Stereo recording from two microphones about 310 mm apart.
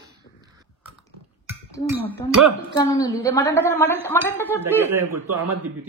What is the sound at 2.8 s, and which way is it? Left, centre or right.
A woman's voice, centre.